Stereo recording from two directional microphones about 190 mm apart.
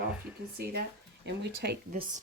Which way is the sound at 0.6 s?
55° right (ahead or behind).